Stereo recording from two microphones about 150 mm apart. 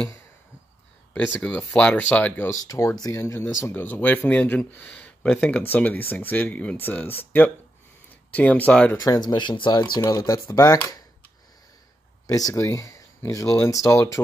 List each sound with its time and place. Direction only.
1.1 s speech: 10° left (ahead or behind)
8.3 s speech: 10° left (ahead or behind)
9.0 s speech: 25° left (ahead or behind)
12.3 s speech: 25° left (ahead or behind)